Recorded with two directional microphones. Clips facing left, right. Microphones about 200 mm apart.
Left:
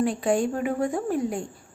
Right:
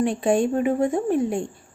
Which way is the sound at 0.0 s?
25° right (ahead or behind).